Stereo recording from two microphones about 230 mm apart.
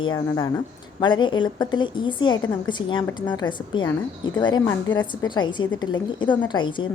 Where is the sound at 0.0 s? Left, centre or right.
Centre.